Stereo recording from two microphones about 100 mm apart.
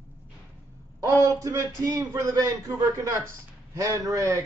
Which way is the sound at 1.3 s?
35° right (ahead or behind).